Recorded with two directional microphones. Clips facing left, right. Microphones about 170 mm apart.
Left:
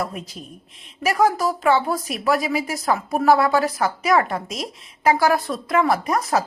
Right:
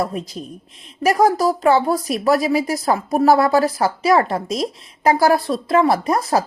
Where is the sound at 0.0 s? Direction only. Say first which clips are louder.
Right 5 dB; 35° right (ahead or behind).